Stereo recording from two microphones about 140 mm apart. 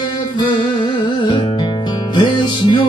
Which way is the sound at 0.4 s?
35° left (ahead or behind).